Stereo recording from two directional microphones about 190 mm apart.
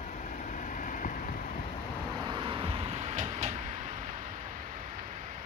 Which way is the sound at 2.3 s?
25° right (ahead or behind).